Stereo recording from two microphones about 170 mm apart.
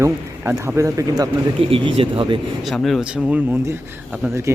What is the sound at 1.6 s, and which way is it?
Speech, 30° right (ahead or behind).